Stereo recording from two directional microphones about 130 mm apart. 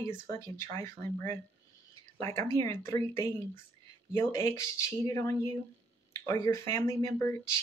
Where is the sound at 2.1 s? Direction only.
20° left (ahead or behind).